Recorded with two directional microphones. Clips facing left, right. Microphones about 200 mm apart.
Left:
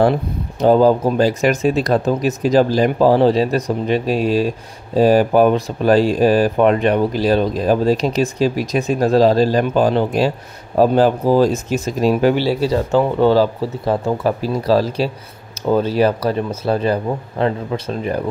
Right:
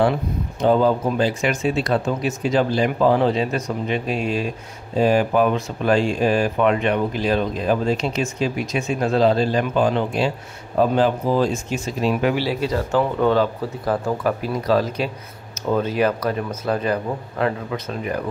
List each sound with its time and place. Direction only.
0.6 s speech: 35° left (ahead or behind)